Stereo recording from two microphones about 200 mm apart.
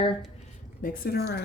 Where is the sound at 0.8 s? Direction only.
45° left (ahead or behind).